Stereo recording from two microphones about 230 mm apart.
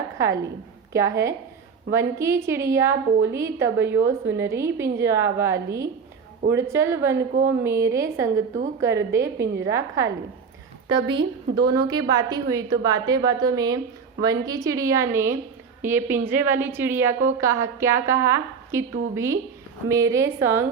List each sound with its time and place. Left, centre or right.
0.9 s a woman's voice: centre